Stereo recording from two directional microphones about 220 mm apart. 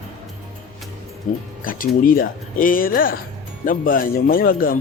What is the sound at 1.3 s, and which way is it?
Speech, 35° left (ahead or behind).